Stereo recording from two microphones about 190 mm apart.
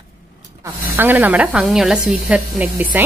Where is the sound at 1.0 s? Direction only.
10° right (ahead or behind).